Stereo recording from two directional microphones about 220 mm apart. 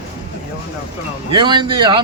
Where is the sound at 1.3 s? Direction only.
20° right (ahead or behind).